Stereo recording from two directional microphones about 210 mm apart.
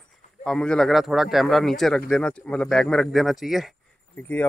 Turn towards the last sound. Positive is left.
turn(degrees=10)  # may be behind; listen again after turning